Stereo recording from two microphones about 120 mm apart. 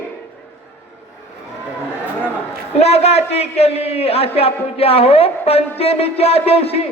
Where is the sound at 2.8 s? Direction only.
60° left (ahead or behind).